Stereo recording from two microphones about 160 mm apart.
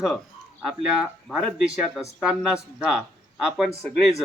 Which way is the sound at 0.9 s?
5° right (ahead or behind).